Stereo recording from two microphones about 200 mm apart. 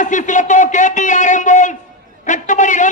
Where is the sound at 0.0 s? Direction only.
40° left (ahead or behind).